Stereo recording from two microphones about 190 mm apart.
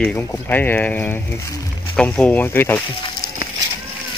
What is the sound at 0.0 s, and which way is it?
Speech, 10° left (ahead or behind).